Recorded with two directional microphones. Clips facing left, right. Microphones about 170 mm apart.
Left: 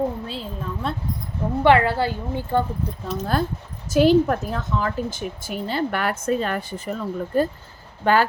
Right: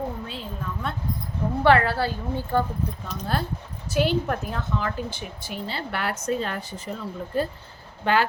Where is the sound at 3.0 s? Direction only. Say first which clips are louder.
Left 7 dB; 45° left (ahead or behind).